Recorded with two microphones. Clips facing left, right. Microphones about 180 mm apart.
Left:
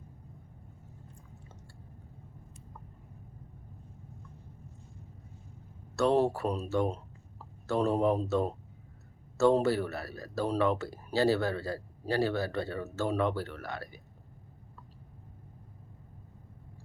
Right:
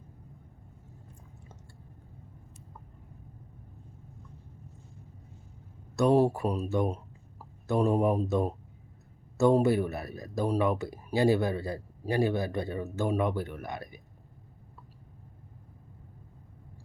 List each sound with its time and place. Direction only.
6.0 s speech: 10° right (ahead or behind)